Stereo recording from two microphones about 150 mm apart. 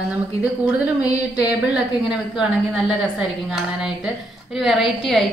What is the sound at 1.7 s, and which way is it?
A woman's voice, 5° right (ahead or behind).